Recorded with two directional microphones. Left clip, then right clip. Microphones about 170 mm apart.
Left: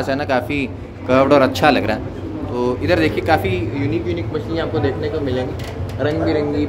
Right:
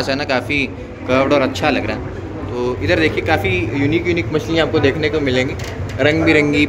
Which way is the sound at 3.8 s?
25° right (ahead or behind).